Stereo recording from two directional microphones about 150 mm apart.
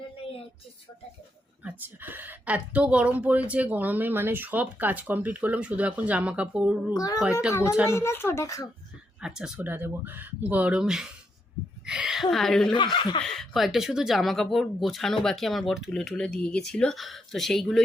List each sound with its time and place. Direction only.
1.6 s speech: 10° right (ahead or behind)
6.9 s speech: 25° left (ahead or behind)
9.2 s speech: 5° right (ahead or behind)
12.7 s speech: 30° left (ahead or behind)
13.2 s speech: centre (ahead or behind)